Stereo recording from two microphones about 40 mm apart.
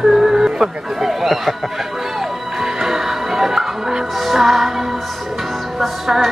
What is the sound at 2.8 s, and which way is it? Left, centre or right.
Music, centre.